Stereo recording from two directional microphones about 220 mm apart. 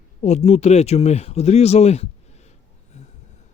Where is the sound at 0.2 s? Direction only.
30° left (ahead or behind).